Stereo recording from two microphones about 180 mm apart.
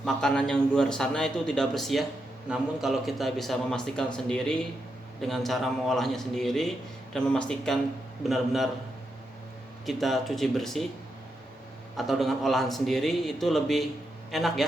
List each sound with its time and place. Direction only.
0.0 s a man's voice: 5° left (ahead or behind)
9.8 s a man's voice: centre (ahead or behind)
11.9 s a man's voice: centre (ahead or behind)